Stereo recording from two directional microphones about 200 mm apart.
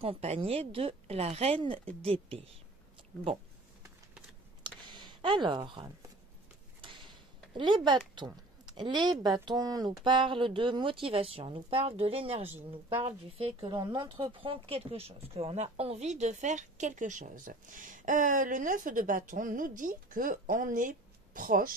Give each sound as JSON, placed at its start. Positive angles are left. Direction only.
{"t": 0.0, "sound": "speech", "side_deg": -30}
{"t": 4.8, "sound": "speech", "side_deg": -25}
{"t": 6.8, "sound": "a sound", "side_deg": -25}
{"t": 8.3, "sound": "speech", "side_deg": -20}